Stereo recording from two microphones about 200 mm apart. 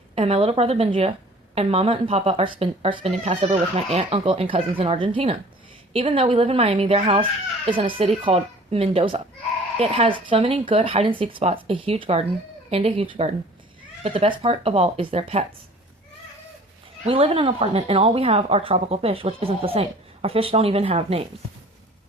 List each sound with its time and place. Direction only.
0.2 s speech: 30° right (ahead or behind)
17.1 s speech: 30° right (ahead or behind)